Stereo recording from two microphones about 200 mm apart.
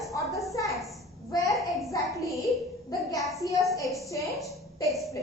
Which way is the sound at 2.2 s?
Centre (ahead or behind).